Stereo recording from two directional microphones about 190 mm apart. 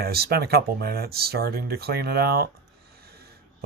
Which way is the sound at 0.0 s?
55° right (ahead or behind).